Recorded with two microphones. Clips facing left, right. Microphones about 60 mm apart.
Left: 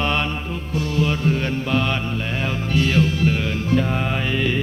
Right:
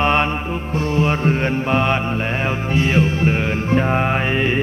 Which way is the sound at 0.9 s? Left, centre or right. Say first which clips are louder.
Right 3 dB; right.